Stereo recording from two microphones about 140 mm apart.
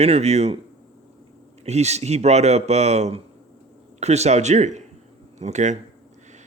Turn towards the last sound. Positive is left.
turn(degrees=-55)  # may be behind; listen again after turning